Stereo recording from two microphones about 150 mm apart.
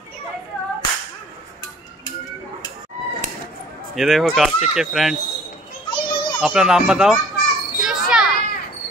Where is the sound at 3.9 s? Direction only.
Centre (ahead or behind).